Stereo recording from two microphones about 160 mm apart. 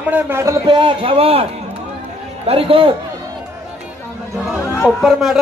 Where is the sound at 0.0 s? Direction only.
10° right (ahead or behind).